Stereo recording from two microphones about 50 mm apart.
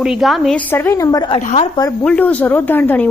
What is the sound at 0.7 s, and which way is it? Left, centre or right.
Speech, left.